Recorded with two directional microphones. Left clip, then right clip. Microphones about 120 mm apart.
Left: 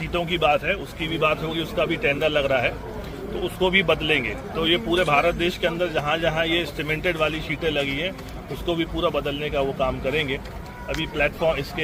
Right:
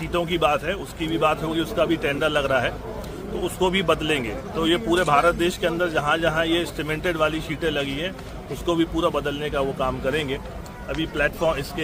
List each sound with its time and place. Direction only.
0.1 s a man's voice: 40° right (ahead or behind)